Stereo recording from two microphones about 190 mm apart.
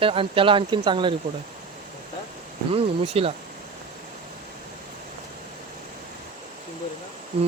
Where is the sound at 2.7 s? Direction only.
30° right (ahead or behind).